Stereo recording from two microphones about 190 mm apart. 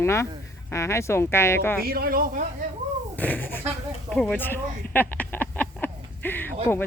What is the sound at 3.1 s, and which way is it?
Speech, 10° left (ahead or behind).